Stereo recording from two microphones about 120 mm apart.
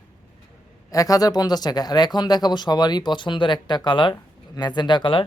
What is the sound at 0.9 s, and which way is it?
Speech, 30° left (ahead or behind).